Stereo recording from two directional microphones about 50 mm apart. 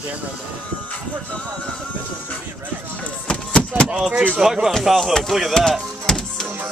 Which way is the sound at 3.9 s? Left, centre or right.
Centre.